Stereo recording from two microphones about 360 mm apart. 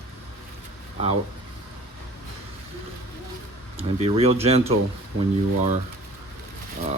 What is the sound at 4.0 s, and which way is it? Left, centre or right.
Speech, centre.